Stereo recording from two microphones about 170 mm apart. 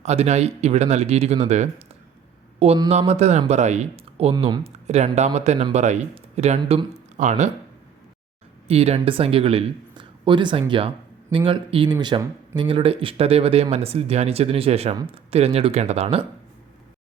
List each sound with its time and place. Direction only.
0.0 s speech: 40° right (ahead or behind)
8.6 s speech: 35° right (ahead or behind)